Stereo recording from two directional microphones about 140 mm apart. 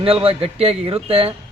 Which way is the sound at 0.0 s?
40° right (ahead or behind).